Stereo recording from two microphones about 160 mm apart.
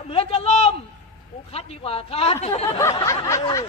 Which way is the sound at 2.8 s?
20° left (ahead or behind).